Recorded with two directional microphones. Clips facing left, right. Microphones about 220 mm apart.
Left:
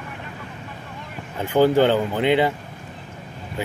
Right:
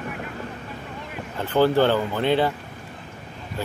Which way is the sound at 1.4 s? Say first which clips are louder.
Left 2 dB; 15° left (ahead or behind).